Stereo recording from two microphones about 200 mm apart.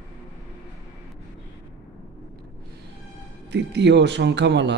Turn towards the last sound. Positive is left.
turn(degrees=-60)  # may be behind; listen again after turning